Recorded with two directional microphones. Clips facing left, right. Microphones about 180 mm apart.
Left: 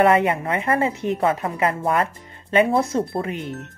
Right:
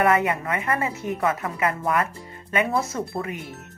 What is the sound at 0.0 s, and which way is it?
Speech, 30° left (ahead or behind).